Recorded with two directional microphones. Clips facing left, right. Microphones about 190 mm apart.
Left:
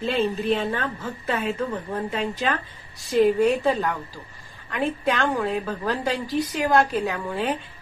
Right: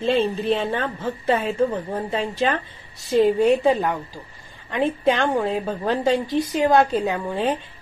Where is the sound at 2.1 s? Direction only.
30° right (ahead or behind).